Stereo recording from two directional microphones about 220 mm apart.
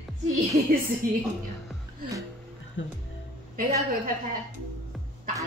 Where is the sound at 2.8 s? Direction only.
55° left (ahead or behind).